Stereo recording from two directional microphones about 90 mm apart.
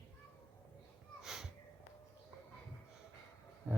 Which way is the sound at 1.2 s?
5° right (ahead or behind).